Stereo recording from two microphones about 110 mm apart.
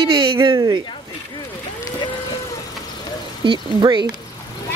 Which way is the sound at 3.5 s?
40° right (ahead or behind).